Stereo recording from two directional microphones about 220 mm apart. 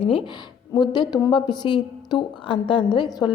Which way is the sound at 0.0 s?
25° left (ahead or behind).